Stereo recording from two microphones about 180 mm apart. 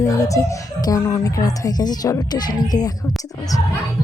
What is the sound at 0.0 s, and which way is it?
Speech, 20° left (ahead or behind).